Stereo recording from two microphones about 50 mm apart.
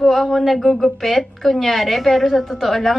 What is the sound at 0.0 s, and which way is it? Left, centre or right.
A woman's voice, centre.